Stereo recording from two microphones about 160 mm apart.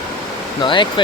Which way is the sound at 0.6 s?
30° left (ahead or behind).